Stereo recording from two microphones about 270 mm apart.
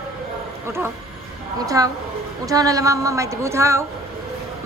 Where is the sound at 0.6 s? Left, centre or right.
Centre.